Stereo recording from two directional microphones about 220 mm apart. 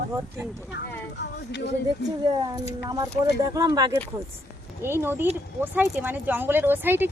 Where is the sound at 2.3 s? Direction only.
20° right (ahead or behind).